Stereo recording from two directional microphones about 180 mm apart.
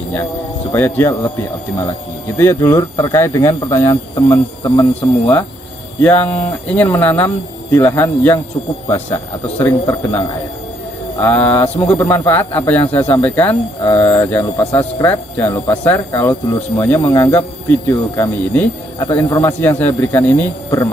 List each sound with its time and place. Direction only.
0.7 s speech: 10° left (ahead or behind)
2.3 s speech: 15° left (ahead or behind)